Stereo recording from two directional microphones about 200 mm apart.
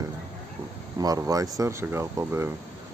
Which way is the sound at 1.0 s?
15° right (ahead or behind).